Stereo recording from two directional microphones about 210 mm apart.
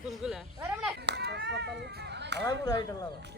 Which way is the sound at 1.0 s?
55° right (ahead or behind).